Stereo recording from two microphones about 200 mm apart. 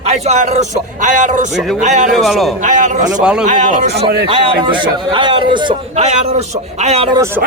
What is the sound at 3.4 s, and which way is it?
A man's voice, 40° right (ahead or behind).